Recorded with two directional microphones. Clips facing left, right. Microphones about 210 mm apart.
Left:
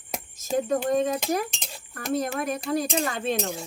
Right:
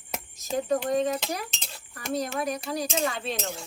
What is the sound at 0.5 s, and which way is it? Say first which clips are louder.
Speech: left 2 dB; 50° left (ahead or behind).